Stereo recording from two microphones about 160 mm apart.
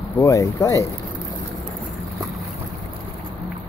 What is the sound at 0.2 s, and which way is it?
Speech, 20° left (ahead or behind).